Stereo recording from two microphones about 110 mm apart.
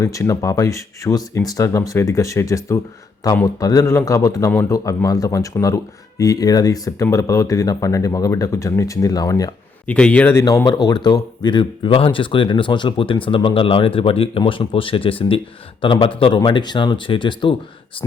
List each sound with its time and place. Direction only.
0.0 s speech: 30° left (ahead or behind)
9.8 s a man's voice: 10° left (ahead or behind)
10.4 s speech: 35° left (ahead or behind)